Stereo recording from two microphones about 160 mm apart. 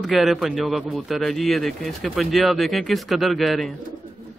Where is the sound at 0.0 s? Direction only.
Centre (ahead or behind).